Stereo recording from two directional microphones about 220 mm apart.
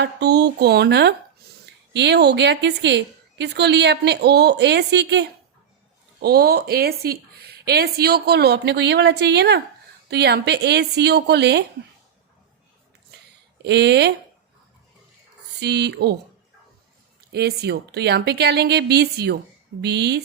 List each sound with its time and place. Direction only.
0.0 s a woman's voice: 50° right (ahead or behind)
6.2 s a woman's voice: 45° right (ahead or behind)
13.6 s a woman's voice: 50° right (ahead or behind)
15.6 s a woman's voice: 50° right (ahead or behind)
17.3 s a woman's voice: 50° right (ahead or behind)